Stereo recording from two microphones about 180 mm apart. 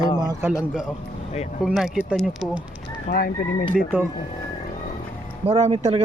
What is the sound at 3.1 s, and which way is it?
Speech, 55° left (ahead or behind).